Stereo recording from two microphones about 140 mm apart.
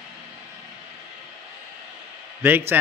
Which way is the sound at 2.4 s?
15° right (ahead or behind).